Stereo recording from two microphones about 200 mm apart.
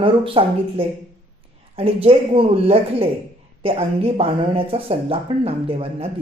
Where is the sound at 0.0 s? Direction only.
25° right (ahead or behind).